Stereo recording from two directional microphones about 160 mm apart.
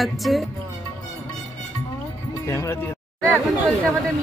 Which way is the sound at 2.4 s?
15° left (ahead or behind).